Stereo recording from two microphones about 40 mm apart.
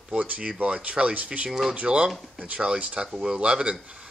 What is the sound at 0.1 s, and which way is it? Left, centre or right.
Speech, right.